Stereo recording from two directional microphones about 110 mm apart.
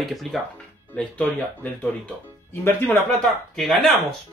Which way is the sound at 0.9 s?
10° left (ahead or behind).